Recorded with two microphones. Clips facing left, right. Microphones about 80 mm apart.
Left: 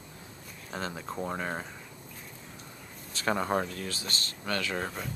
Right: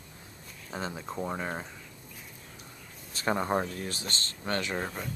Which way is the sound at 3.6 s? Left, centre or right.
Right.